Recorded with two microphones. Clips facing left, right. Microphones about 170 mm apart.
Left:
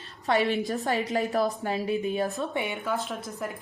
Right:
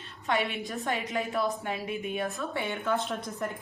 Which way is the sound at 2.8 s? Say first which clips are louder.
Right 1 dB; centre (ahead or behind).